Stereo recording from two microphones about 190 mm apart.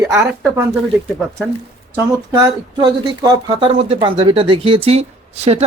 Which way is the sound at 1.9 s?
15° right (ahead or behind).